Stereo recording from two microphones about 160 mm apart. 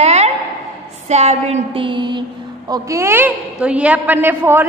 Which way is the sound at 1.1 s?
45° right (ahead or behind).